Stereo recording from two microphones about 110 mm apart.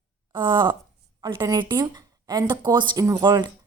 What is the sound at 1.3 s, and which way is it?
A woman's voice, 35° right (ahead or behind).